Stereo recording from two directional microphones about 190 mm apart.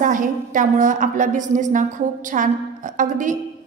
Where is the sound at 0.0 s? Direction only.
45° right (ahead or behind).